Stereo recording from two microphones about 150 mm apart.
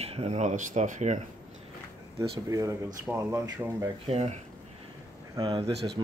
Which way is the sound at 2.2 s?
20° right (ahead or behind).